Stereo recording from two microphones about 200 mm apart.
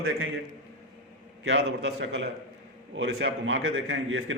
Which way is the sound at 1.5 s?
60° right (ahead or behind).